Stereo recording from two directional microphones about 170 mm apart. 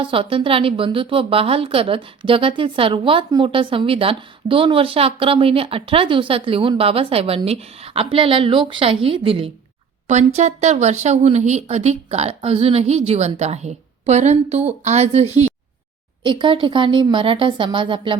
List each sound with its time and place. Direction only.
0.0 s a woman's voice: 30° right (ahead or behind)
10.1 s a woman's voice: 40° right (ahead or behind)